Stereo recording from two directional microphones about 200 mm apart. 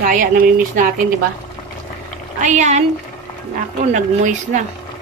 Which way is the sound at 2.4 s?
35° right (ahead or behind).